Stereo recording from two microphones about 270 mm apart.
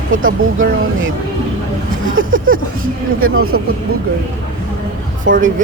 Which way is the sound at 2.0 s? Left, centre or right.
Right.